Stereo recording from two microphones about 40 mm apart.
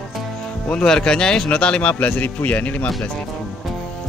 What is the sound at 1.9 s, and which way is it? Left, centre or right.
Speech, left.